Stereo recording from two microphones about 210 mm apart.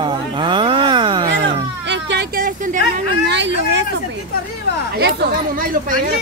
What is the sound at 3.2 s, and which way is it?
Speech, 60° right (ahead or behind).